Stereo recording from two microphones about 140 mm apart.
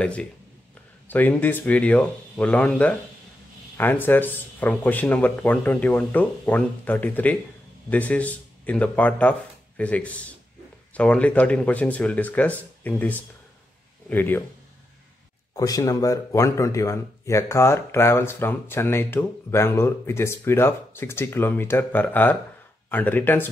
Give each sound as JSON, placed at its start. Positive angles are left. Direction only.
{"t": 0.0, "sound": "speech", "side_deg": 10}
{"t": 15.5, "sound": "speech", "side_deg": 25}